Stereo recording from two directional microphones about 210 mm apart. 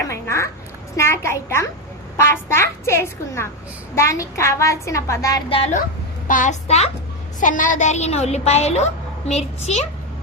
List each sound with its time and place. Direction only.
0.1 s a sound: 15° left (ahead or behind)
0.9 s a woman's voice: 15° left (ahead or behind)
6.2 s a woman's voice: 40° left (ahead or behind)